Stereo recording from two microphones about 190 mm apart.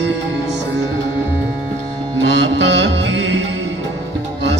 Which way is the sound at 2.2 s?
70° right (ahead or behind).